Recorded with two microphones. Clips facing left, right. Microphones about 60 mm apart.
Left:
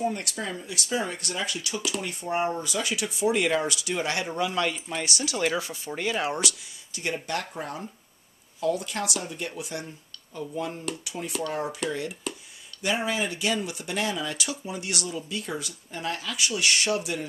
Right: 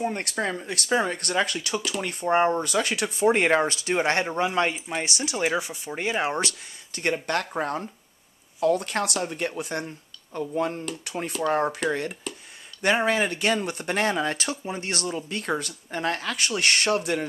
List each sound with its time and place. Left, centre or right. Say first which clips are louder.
0.0 s speech: right 2 dB; right
6.9 s speech: right 4 dB; right